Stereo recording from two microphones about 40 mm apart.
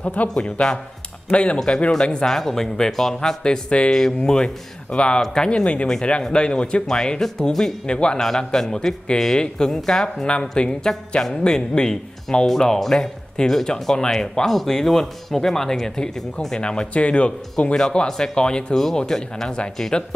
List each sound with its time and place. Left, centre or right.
0.0 s speech: left
0.3 s speech: centre
5.5 s speech: left
6.9 s speech: centre
7.8 s speech: left
8.2 s speech: centre
13.4 s speech: centre
17.7 s speech: centre